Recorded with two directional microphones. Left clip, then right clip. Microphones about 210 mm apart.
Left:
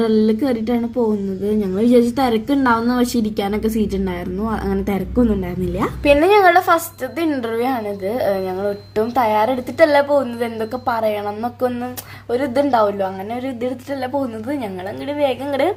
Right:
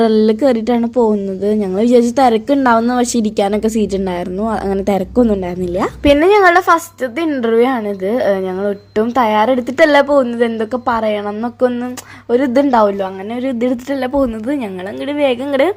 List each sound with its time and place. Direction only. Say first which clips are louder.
0.0 s speech: right 6 dB; 30° right (ahead or behind)